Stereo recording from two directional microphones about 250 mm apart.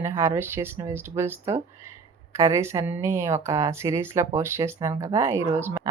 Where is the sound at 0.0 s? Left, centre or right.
Centre.